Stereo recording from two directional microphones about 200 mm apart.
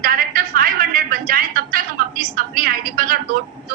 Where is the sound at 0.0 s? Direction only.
45° right (ahead or behind).